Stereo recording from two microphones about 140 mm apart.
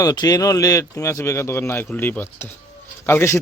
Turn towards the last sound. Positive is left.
turn(degrees=15)  # may be behind; listen again after turning